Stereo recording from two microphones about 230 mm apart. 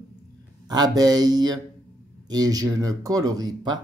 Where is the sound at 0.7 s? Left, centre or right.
Centre.